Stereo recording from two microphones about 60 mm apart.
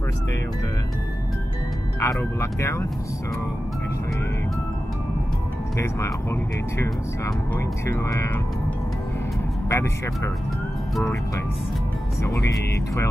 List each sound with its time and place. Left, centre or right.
2.0 s speech: left
5.8 s speech: left
7.8 s speech: left
9.7 s speech: left